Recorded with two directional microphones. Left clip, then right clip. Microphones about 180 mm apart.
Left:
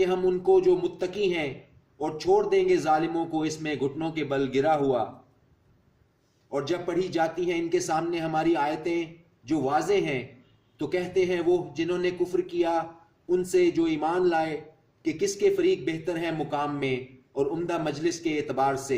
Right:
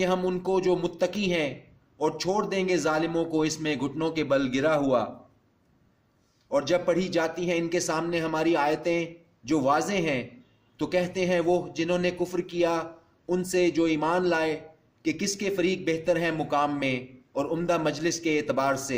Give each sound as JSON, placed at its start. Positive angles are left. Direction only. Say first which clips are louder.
{"t": 0.0, "sound": "a man's voice", "louder": "left 2 dB", "side_deg": -50}
{"t": 6.5, "sound": "a man's voice", "louder": "right 5 dB", "side_deg": -45}